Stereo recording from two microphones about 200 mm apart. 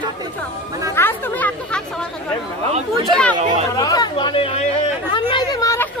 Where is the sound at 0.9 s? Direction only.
10° left (ahead or behind).